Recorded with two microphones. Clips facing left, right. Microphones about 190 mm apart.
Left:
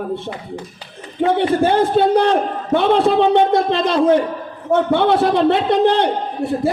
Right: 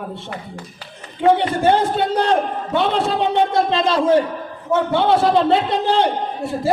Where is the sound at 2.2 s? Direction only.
55° left (ahead or behind).